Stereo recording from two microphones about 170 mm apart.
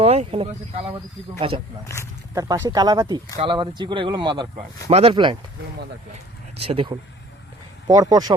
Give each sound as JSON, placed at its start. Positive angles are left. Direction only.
{"t": 0.0, "sound": "speech", "side_deg": -35}
{"t": 2.3, "sound": "speech", "side_deg": -20}
{"t": 6.7, "sound": "speech", "side_deg": -30}
{"t": 7.9, "sound": "speech", "side_deg": -20}